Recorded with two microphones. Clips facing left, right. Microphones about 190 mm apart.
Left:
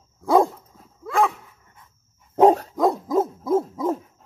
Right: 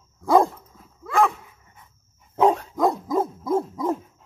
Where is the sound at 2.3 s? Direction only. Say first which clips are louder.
Left 4 dB; 40° left (ahead or behind).